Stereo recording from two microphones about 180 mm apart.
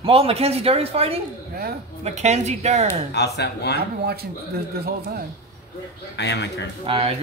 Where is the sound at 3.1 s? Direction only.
70° left (ahead or behind).